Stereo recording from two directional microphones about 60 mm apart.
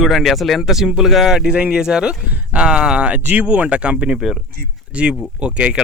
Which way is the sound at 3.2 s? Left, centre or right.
Right.